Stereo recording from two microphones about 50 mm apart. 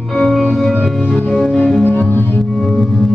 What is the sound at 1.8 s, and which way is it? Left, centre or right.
Music, left.